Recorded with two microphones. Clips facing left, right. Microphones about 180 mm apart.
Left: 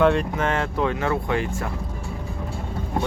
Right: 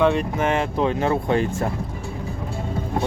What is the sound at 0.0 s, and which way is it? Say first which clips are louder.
Speech: even; 5° right (ahead or behind).